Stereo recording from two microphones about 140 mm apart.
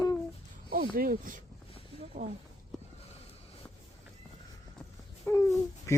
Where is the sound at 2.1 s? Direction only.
60° right (ahead or behind).